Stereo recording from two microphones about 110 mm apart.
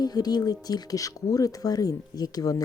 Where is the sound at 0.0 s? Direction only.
35° left (ahead or behind).